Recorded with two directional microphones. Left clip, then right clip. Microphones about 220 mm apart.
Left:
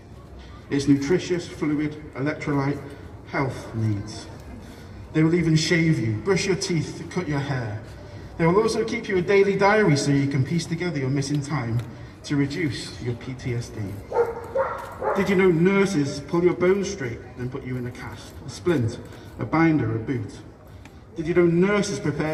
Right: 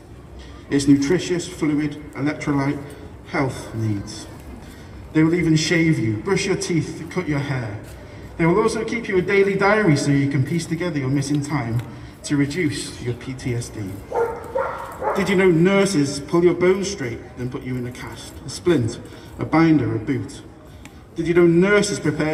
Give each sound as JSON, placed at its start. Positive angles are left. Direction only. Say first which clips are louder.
{"t": 0.7, "sound": "a man's voice", "louder": "right 4 dB", "side_deg": -35}
{"t": 5.1, "sound": "a man's voice", "louder": "right 4 dB", "side_deg": -15}
{"t": 12.2, "sound": "a man's voice", "louder": "right 4 dB", "side_deg": -45}
{"t": 15.1, "sound": "a man's voice", "louder": "right 3 dB", "side_deg": -35}